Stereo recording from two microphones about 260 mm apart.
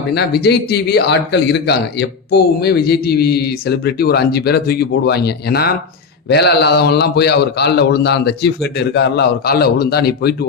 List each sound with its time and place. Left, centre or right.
0.1 s a man's voice: left